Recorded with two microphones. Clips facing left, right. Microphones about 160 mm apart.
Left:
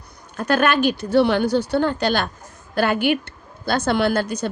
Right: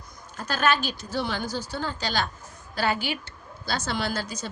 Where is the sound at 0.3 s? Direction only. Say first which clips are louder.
Left 7 dB; 60° left (ahead or behind).